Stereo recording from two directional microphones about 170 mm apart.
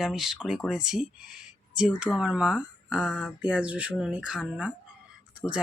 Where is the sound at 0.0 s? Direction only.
Centre (ahead or behind).